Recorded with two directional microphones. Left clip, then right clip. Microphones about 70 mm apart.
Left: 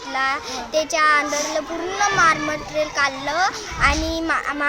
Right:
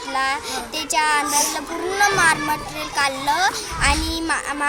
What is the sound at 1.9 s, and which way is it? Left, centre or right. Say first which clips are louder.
A child's voice: even; left.